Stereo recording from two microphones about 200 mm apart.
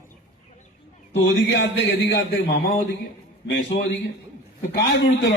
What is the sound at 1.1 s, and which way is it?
A man's voice, 65° left (ahead or behind).